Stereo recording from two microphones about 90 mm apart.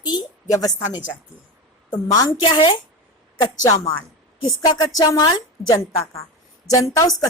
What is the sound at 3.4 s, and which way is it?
Speech, 40° left (ahead or behind).